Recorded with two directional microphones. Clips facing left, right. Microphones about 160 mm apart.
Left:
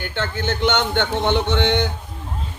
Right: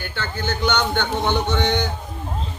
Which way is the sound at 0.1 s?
25° left (ahead or behind).